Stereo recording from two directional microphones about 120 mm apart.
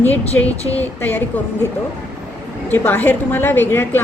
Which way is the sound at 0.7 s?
15° left (ahead or behind).